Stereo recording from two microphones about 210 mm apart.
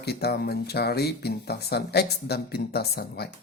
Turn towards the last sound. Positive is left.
turn(degrees=50)  # may be behind; listen again after turning